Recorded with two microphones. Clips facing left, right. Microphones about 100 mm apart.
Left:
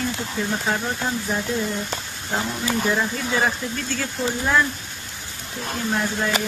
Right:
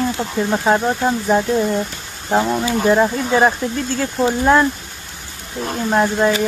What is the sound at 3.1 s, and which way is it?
Speech, 40° right (ahead or behind).